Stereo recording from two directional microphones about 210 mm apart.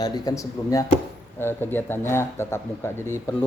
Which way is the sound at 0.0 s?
20° left (ahead or behind).